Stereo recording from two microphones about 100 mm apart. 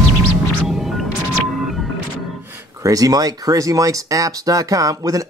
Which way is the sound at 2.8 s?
35° right (ahead or behind).